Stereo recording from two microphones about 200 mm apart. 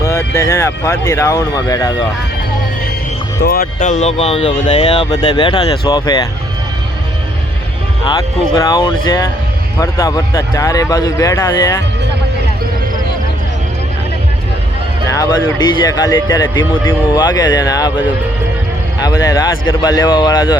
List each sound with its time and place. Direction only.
0.0 s speech: 15° left (ahead or behind)
3.4 s speech: 50° left (ahead or behind); by 5.0 s 35° left (ahead or behind)
5.1 s speech: 25° left (ahead or behind)
8.0 s speech: 20° left (ahead or behind)
15.1 s speech: 20° left (ahead or behind)
19.0 s speech: 15° left (ahead or behind)